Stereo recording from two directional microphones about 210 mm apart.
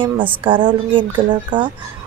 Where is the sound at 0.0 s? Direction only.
25° right (ahead or behind).